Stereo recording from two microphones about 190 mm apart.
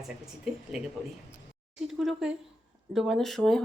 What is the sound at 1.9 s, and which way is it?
Speech, centre (ahead or behind).